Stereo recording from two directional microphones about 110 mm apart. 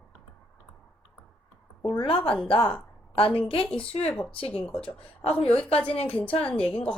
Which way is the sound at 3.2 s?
55° left (ahead or behind).